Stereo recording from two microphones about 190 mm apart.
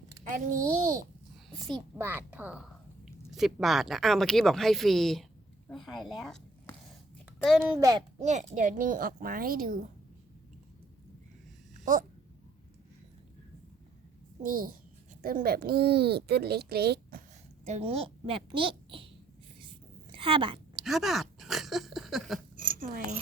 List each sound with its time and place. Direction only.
0.3 s a child's voice: 45° right (ahead or behind)
2.0 s a child's voice: 10° right (ahead or behind)
7.6 s a child's voice: 15° right (ahead or behind)
8.2 s a child's voice: 40° right (ahead or behind)
14.4 s a child's voice: 50° right (ahead or behind)
17.7 s a child's voice: 30° right (ahead or behind)
19.5 s a sound: 25° right (ahead or behind)
20.8 s a sound: centre (ahead or behind)
22.5 s a sound: 45° right (ahead or behind)